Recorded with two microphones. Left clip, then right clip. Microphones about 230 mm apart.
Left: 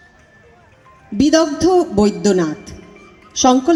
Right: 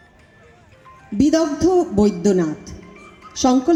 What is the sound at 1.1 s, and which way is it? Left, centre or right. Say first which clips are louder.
A woman's voice: left 3 dB; left.